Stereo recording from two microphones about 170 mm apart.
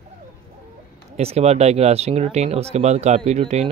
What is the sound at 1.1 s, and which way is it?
Speech, 40° right (ahead or behind).